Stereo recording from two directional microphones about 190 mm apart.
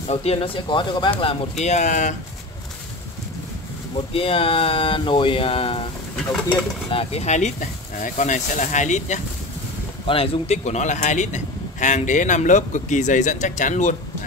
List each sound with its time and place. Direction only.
0.1 s speech: 30° left (ahead or behind)
1.6 s a man's voice: 40° left (ahead or behind)
4.1 s speech: 30° left (ahead or behind)
6.9 s a man's voice: 30° left (ahead or behind)